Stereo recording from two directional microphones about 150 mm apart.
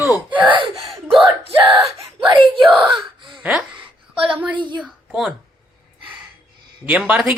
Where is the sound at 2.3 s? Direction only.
35° right (ahead or behind).